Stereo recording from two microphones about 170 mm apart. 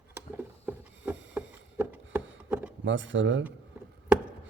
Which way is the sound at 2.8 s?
90° right.